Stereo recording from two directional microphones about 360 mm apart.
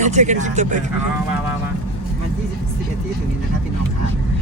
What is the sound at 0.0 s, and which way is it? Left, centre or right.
Speech, centre.